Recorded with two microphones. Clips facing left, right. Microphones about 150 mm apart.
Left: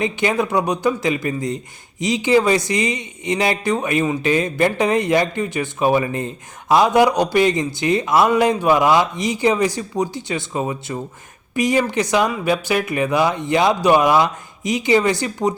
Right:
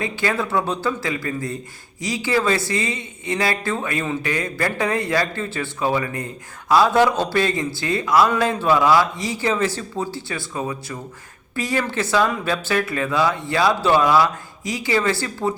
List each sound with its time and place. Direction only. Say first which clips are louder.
0.0 s speech: left 4 dB; 20° left (ahead or behind)